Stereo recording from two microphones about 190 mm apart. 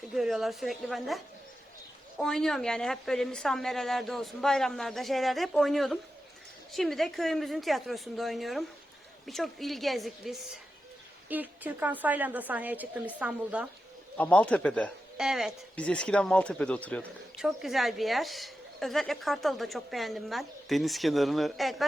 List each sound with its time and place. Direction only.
0.1 s a woman's voice: centre (ahead or behind)
14.2 s speech: 5° left (ahead or behind)